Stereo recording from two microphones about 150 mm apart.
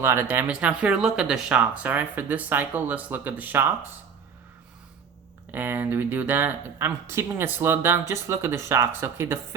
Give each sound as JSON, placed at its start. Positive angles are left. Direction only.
{"t": 0.0, "sound": "speech", "side_deg": -15}
{"t": 5.5, "sound": "speech", "side_deg": -15}